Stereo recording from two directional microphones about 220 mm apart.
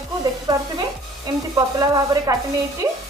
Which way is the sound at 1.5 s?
15° right (ahead or behind).